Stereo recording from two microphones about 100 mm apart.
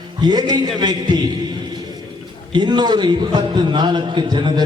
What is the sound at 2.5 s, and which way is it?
A man's voice, 45° right (ahead or behind).